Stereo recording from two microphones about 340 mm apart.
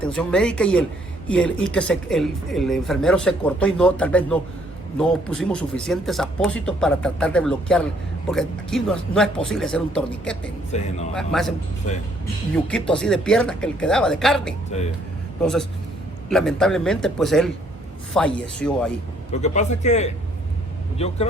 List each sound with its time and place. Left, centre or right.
0.0 s speech: centre
10.7 s a man's voice: centre
11.1 s speech: centre
19.3 s a man's voice: centre